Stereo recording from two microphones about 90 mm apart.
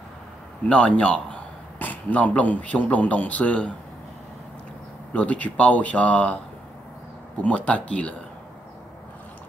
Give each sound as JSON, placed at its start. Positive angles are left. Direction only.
{"t": 0.7, "sound": "a man's voice", "side_deg": 15}
{"t": 5.1, "sound": "speech", "side_deg": 15}
{"t": 7.4, "sound": "speech", "side_deg": 15}